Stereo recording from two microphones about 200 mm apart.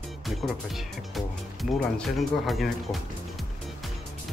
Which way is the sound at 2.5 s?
Centre (ahead or behind).